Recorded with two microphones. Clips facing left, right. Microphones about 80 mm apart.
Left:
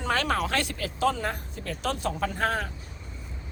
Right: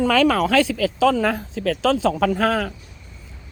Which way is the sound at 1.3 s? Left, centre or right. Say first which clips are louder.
Right 11 dB; right.